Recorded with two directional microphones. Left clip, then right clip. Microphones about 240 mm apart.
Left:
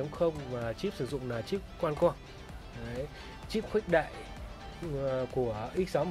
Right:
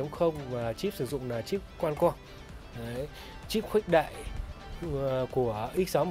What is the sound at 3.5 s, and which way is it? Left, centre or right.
Speech, right.